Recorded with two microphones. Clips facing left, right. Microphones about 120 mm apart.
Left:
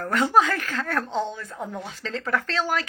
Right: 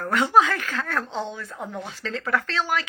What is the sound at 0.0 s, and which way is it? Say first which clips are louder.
Speech: right 1 dB; 40° left (ahead or behind).